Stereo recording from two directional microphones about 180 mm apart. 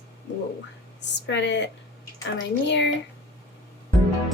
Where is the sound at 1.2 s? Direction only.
80° left.